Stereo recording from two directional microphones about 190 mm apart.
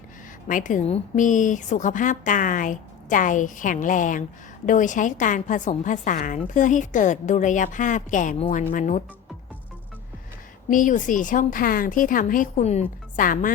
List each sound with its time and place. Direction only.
0.4 s a woman's voice: 45° left (ahead or behind)
10.7 s a woman's voice: 45° left (ahead or behind)